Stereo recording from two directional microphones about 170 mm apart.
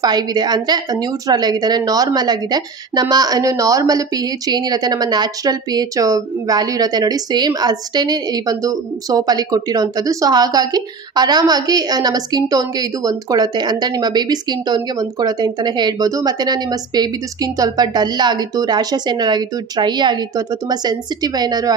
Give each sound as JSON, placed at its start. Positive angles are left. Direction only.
{"t": 0.0, "sound": "speech", "side_deg": -25}